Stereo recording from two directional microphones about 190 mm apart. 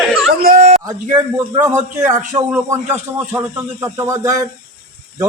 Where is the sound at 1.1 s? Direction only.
15° right (ahead or behind).